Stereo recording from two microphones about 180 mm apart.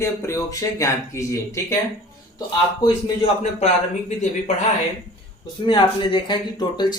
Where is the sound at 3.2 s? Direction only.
35° left (ahead or behind).